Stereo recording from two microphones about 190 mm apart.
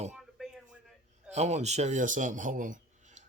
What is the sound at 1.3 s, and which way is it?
A man's voice, 35° right (ahead or behind).